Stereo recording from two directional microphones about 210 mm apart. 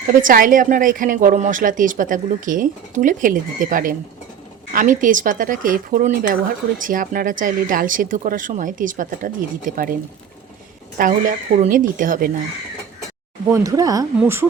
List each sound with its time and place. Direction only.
0.2 s a woman's voice: 40° right (ahead or behind)
10.9 s a woman's voice: 40° right (ahead or behind)
13.5 s speech: 15° right (ahead or behind)